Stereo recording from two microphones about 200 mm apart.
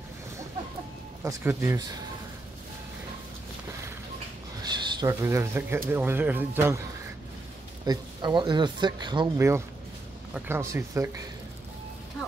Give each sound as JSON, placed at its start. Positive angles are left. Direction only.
{"t": 1.2, "sound": "speech", "side_deg": -15}
{"t": 4.6, "sound": "speech", "side_deg": -20}
{"t": 7.8, "sound": "speech", "side_deg": -20}